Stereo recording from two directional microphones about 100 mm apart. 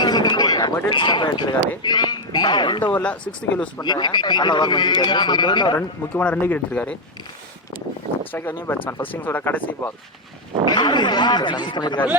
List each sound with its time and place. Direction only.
0.0 s a sound: 45° left (ahead or behind)
0.9 s speech: 50° left (ahead or behind)
2.8 s speech: 15° left (ahead or behind)
3.8 s speech: 45° left (ahead or behind)
6.1 s speech: 15° left (ahead or behind)
8.3 s speech: 20° left (ahead or behind)
10.7 s speech: 45° left (ahead or behind)